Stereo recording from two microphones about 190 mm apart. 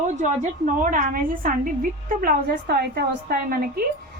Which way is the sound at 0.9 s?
45° right (ahead or behind).